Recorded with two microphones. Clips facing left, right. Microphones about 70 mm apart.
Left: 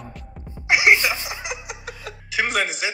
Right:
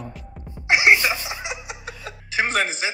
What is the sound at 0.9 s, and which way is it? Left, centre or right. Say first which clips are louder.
Chuckle: even; right.